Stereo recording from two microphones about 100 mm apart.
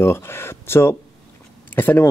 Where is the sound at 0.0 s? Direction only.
25° left (ahead or behind).